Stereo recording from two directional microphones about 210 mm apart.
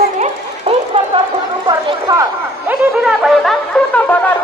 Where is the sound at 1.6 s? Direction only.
20° right (ahead or behind).